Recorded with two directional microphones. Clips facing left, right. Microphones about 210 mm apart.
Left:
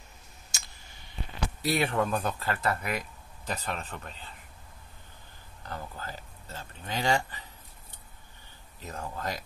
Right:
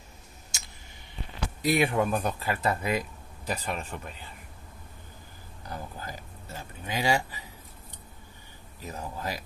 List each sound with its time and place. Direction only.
1.6 s speech: 15° right (ahead or behind)
3.4 s speech: 10° right (ahead or behind)
5.6 s speech: 15° right (ahead or behind)
8.8 s speech: 10° right (ahead or behind)